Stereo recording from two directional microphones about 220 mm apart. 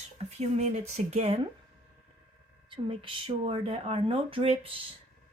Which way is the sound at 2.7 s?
25° right (ahead or behind).